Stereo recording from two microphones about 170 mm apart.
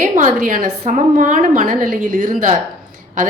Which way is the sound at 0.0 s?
50° right (ahead or behind).